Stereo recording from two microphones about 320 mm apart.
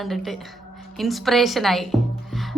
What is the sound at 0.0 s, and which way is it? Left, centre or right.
A woman's voice, centre.